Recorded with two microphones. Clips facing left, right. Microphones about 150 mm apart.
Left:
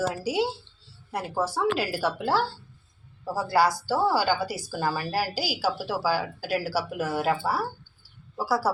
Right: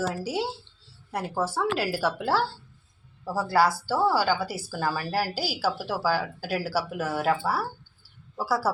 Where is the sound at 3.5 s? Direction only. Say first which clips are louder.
Even; 5° right (ahead or behind).